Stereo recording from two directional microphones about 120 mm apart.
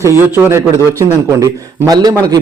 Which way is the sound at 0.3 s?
20° right (ahead or behind).